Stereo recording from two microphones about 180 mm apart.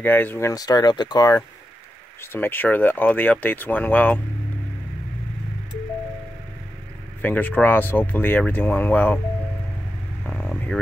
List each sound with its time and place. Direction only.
0.0 s speech: 10° left (ahead or behind)
7.2 s speech: 10° left (ahead or behind)
10.2 s vehicle: 10° left (ahead or behind)